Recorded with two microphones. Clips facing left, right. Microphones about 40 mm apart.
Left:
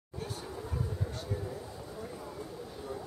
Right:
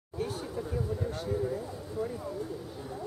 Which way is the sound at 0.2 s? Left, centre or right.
Centre.